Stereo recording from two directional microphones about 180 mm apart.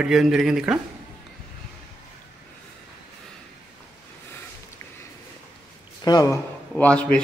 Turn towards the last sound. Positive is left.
turn(degrees=5)  # may be behind; listen again after turning